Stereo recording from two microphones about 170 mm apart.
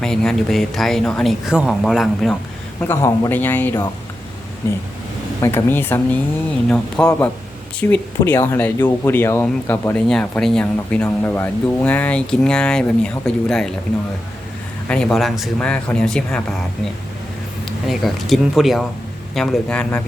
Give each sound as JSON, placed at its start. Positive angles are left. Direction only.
{"t": 0.0, "sound": "speech", "side_deg": 5}
{"t": 2.8, "sound": "speech", "side_deg": 15}
{"t": 14.8, "sound": "speech", "side_deg": 5}
{"t": 17.8, "sound": "speech", "side_deg": 0}